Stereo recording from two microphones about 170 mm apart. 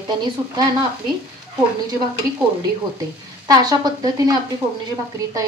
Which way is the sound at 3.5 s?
20° right (ahead or behind).